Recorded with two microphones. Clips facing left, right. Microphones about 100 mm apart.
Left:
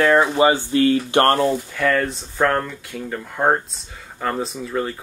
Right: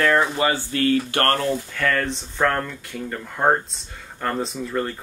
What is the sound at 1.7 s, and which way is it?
Speech, 5° left (ahead or behind).